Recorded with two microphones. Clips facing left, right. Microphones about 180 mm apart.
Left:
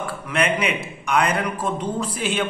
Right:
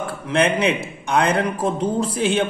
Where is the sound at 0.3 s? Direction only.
30° right (ahead or behind).